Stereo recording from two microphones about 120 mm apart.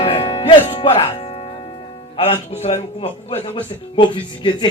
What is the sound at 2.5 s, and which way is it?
Speech, 60° left (ahead or behind).